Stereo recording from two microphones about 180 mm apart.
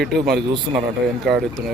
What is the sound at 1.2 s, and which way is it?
Speech, centre (ahead or behind).